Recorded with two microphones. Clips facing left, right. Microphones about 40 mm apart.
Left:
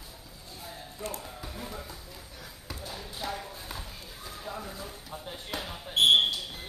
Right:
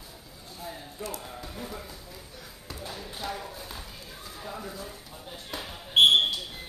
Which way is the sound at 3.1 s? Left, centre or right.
Centre.